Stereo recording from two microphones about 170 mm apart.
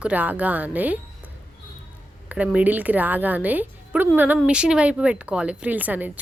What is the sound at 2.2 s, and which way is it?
Speech, 10° right (ahead or behind).